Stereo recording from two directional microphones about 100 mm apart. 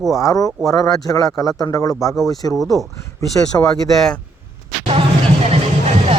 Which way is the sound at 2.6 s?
Centre (ahead or behind).